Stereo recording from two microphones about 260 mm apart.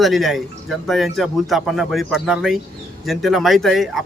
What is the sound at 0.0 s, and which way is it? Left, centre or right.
Speech, centre.